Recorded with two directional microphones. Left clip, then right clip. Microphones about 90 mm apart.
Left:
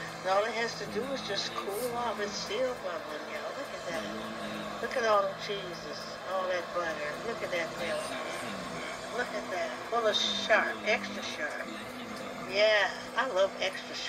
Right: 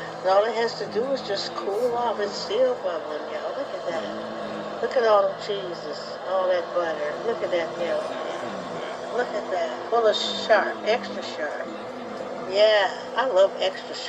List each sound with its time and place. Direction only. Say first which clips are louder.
0.2 s speech: right 9 dB; 45° right (ahead or behind)
4.8 s speech: right 8 dB; 40° right (ahead or behind)
9.1 s speech: right 9 dB; 45° right (ahead or behind)
12.5 s speech: right 7 dB; 45° right (ahead or behind)